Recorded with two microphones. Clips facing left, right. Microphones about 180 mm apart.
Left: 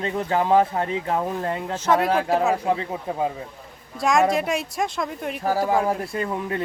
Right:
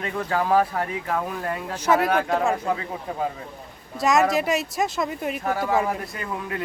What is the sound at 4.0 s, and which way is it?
Speech, centre (ahead or behind).